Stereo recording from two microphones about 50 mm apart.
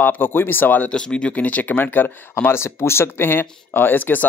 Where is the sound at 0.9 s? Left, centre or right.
Centre; by 2.5 s left.